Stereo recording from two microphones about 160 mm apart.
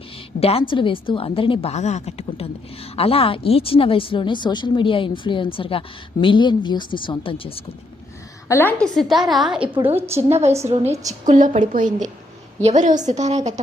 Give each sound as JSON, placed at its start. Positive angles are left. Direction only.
{"t": 0.3, "sound": "a woman's voice", "side_deg": 40}
{"t": 8.4, "sound": "a woman's voice", "side_deg": 15}
{"t": 9.0, "sound": "a woman's voice", "side_deg": 0}
{"t": 9.8, "sound": "a woman's voice", "side_deg": -15}
{"t": 10.2, "sound": "a woman's voice", "side_deg": -40}
{"t": 11.3, "sound": "a woman's voice", "side_deg": -50}